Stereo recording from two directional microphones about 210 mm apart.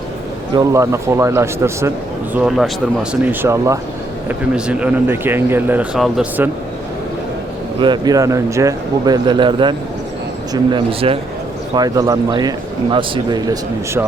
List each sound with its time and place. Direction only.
0.5 s speech: 15° right (ahead or behind)
7.8 s a man's voice: 20° right (ahead or behind)